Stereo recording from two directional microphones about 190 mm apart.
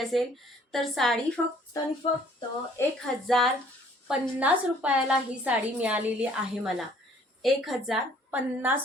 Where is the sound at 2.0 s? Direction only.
25° left (ahead or behind).